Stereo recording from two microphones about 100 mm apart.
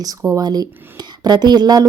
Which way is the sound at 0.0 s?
30° right (ahead or behind).